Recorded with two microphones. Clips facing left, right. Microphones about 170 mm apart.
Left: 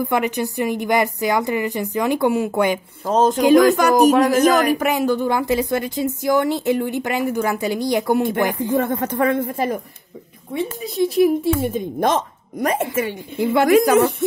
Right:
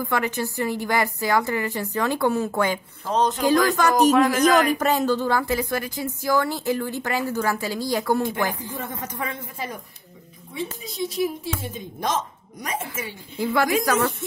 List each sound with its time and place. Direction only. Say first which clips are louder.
0.0 s speech: left 5 dB; 20° left (ahead or behind)
3.1 s speech: left 6 dB; 45° left (ahead or behind)
3.4 s speech: left 7 dB; 15° left (ahead or behind)
4.2 s speech: left 3 dB; 45° left (ahead or behind)
4.7 s a woman's voice: left 2 dB; 10° left (ahead or behind)
8.5 s a woman's voice: left 11 dB; 60° left (ahead or behind)
13.4 s a woman's voice: left 5 dB; 20° left (ahead or behind)